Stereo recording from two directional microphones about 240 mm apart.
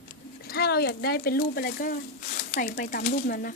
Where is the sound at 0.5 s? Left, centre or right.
Left.